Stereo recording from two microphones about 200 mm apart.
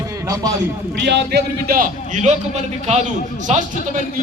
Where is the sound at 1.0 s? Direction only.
55° right (ahead or behind).